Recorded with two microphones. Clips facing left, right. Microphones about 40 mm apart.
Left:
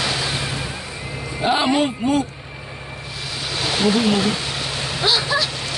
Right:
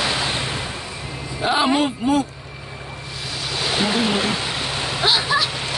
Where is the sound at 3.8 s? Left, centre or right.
Centre.